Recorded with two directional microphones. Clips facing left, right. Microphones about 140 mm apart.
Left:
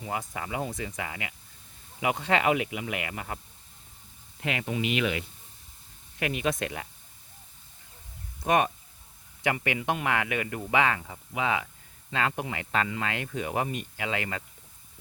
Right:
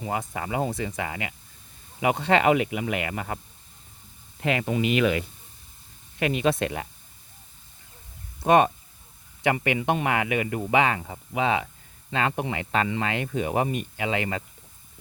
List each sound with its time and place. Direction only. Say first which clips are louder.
0.1 s speech: right 4 dB; 35° right (ahead or behind)
6.1 s speech: right 5 dB; 25° right (ahead or behind)
8.4 s speech: right 6 dB; 30° right (ahead or behind)